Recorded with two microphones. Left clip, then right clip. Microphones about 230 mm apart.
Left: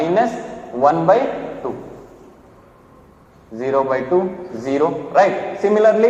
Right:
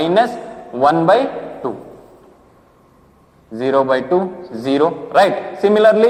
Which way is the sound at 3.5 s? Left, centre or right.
Right.